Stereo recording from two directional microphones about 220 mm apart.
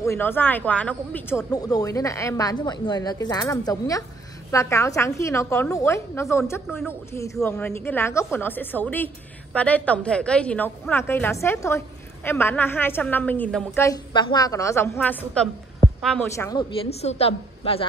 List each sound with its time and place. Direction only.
0.0 s a woman's voice: 10° left (ahead or behind)
13.8 s a woman's voice: 20° left (ahead or behind)